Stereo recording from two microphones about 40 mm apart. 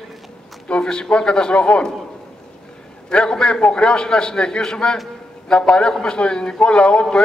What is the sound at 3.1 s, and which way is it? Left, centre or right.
A man's voice, left.